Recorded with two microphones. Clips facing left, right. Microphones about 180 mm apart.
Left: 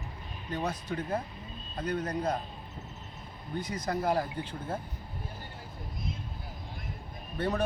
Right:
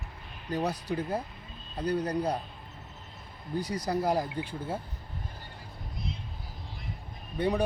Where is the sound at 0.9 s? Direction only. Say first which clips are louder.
Right 2 dB; 10° right (ahead or behind).